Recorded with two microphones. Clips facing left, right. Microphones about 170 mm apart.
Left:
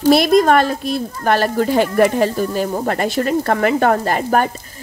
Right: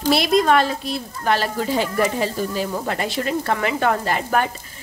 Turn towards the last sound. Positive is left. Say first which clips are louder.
# left 4 dB
turn(degrees=45)  # may be behind; listen again after turning